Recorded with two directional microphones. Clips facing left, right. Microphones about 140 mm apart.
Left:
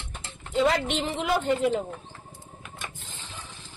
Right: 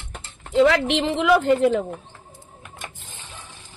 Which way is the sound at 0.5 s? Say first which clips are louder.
Right 6 dB; 90° right.